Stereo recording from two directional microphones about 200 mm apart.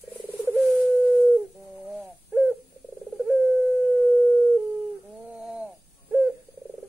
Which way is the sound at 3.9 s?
5° left (ahead or behind).